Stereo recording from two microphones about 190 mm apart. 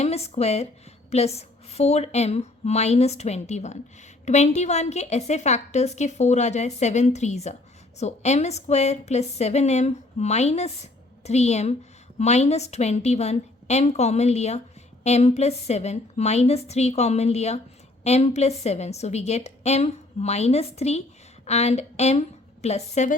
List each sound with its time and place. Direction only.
0.0 s a woman's voice: 35° left (ahead or behind)